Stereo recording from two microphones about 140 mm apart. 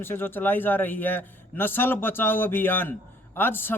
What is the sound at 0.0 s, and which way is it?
Speech, 15° left (ahead or behind).